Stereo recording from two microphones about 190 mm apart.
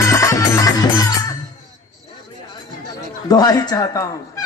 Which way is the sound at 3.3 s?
20° left (ahead or behind).